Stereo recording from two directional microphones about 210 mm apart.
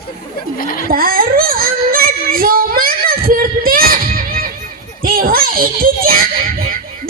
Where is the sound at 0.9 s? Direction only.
45° right (ahead or behind).